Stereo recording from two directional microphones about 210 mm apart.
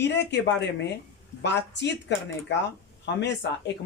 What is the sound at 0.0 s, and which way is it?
A woman's voice, 55° left (ahead or behind).